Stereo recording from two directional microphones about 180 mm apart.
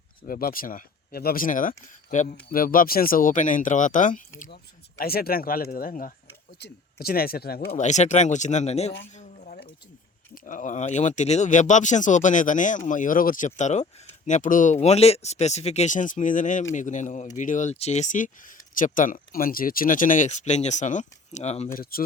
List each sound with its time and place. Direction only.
0.3 s speech: 55° left (ahead or behind)
6.6 s speech: 65° left (ahead or behind)
7.8 s speech: 40° left (ahead or behind)
9.1 s a sound: 40° left (ahead or behind)
10.3 s speech: 45° left (ahead or behind)
21.7 s speech: 55° left (ahead or behind)